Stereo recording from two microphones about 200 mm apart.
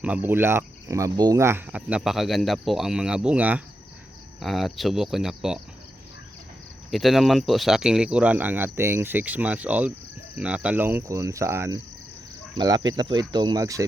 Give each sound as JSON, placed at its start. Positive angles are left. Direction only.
{"t": 0.0, "sound": "speech", "side_deg": -10}
{"t": 6.9, "sound": "speech", "side_deg": 0}